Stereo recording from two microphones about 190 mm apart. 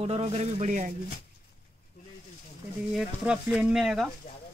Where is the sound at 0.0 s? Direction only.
30° right (ahead or behind).